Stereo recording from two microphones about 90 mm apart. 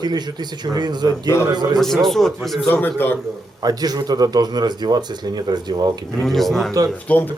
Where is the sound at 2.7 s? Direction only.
20° left (ahead or behind).